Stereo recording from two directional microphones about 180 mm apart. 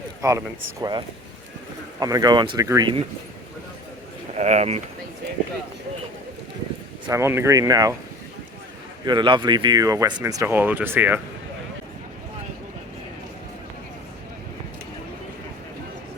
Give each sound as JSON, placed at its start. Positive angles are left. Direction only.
{"t": 0.2, "sound": "speech", "side_deg": -15}
{"t": 4.4, "sound": "speech", "side_deg": -40}
{"t": 7.1, "sound": "speech", "side_deg": -15}
{"t": 9.0, "sound": "speech", "side_deg": -25}